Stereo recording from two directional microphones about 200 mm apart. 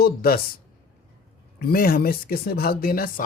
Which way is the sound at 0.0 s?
50° left (ahead or behind).